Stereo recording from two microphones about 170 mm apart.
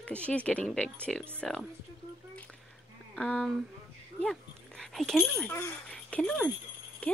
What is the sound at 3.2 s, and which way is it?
Speech, 5° left (ahead or behind).